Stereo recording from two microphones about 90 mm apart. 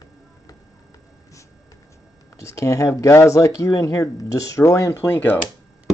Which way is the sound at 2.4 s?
35° left (ahead or behind).